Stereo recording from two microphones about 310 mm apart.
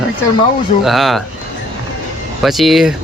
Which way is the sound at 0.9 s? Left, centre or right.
Centre.